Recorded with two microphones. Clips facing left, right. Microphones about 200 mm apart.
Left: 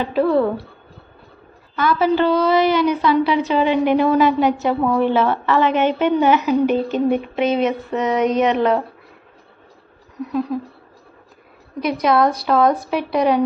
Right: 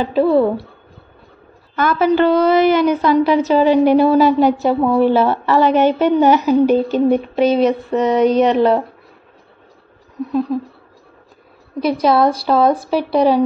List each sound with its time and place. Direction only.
0.0 s speech: 30° right (ahead or behind)
1.8 s a woman's voice: 50° right (ahead or behind); by 8.7 s 35° right (ahead or behind)
11.8 s a woman's voice: 30° right (ahead or behind)